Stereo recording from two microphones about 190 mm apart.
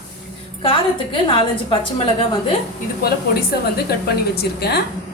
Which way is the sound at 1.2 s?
25° left (ahead or behind).